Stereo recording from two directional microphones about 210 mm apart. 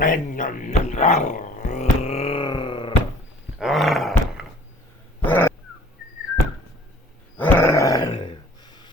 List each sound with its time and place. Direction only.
0.0 s speech: 40° left (ahead or behind); by 2.9 s 25° left (ahead or behind)
3.6 s dog: centre (ahead or behind)
7.3 s a sound: 10° left (ahead or behind)